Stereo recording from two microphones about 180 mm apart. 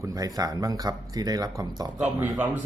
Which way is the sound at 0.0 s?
20° right (ahead or behind).